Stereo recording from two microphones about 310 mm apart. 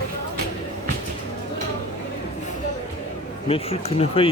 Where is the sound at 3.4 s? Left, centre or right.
Centre.